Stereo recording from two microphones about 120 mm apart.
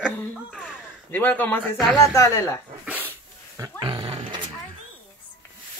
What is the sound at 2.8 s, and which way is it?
Dog, 15° right (ahead or behind).